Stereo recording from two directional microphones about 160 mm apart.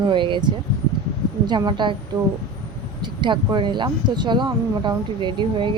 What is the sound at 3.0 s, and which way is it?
Speech, 30° right (ahead or behind).